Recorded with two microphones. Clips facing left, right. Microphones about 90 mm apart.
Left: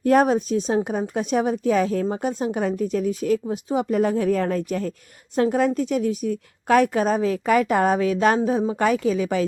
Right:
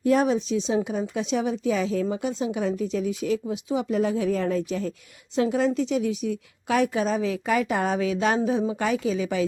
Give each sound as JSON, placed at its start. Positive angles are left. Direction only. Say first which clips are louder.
{"t": 0.0, "sound": "a woman's voice", "louder": "left 4 dB", "side_deg": 50}